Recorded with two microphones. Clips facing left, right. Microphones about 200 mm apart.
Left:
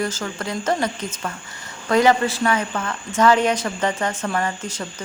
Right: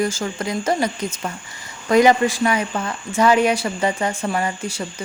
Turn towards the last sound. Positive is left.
turn(degrees=-10)  # may be behind; listen again after turning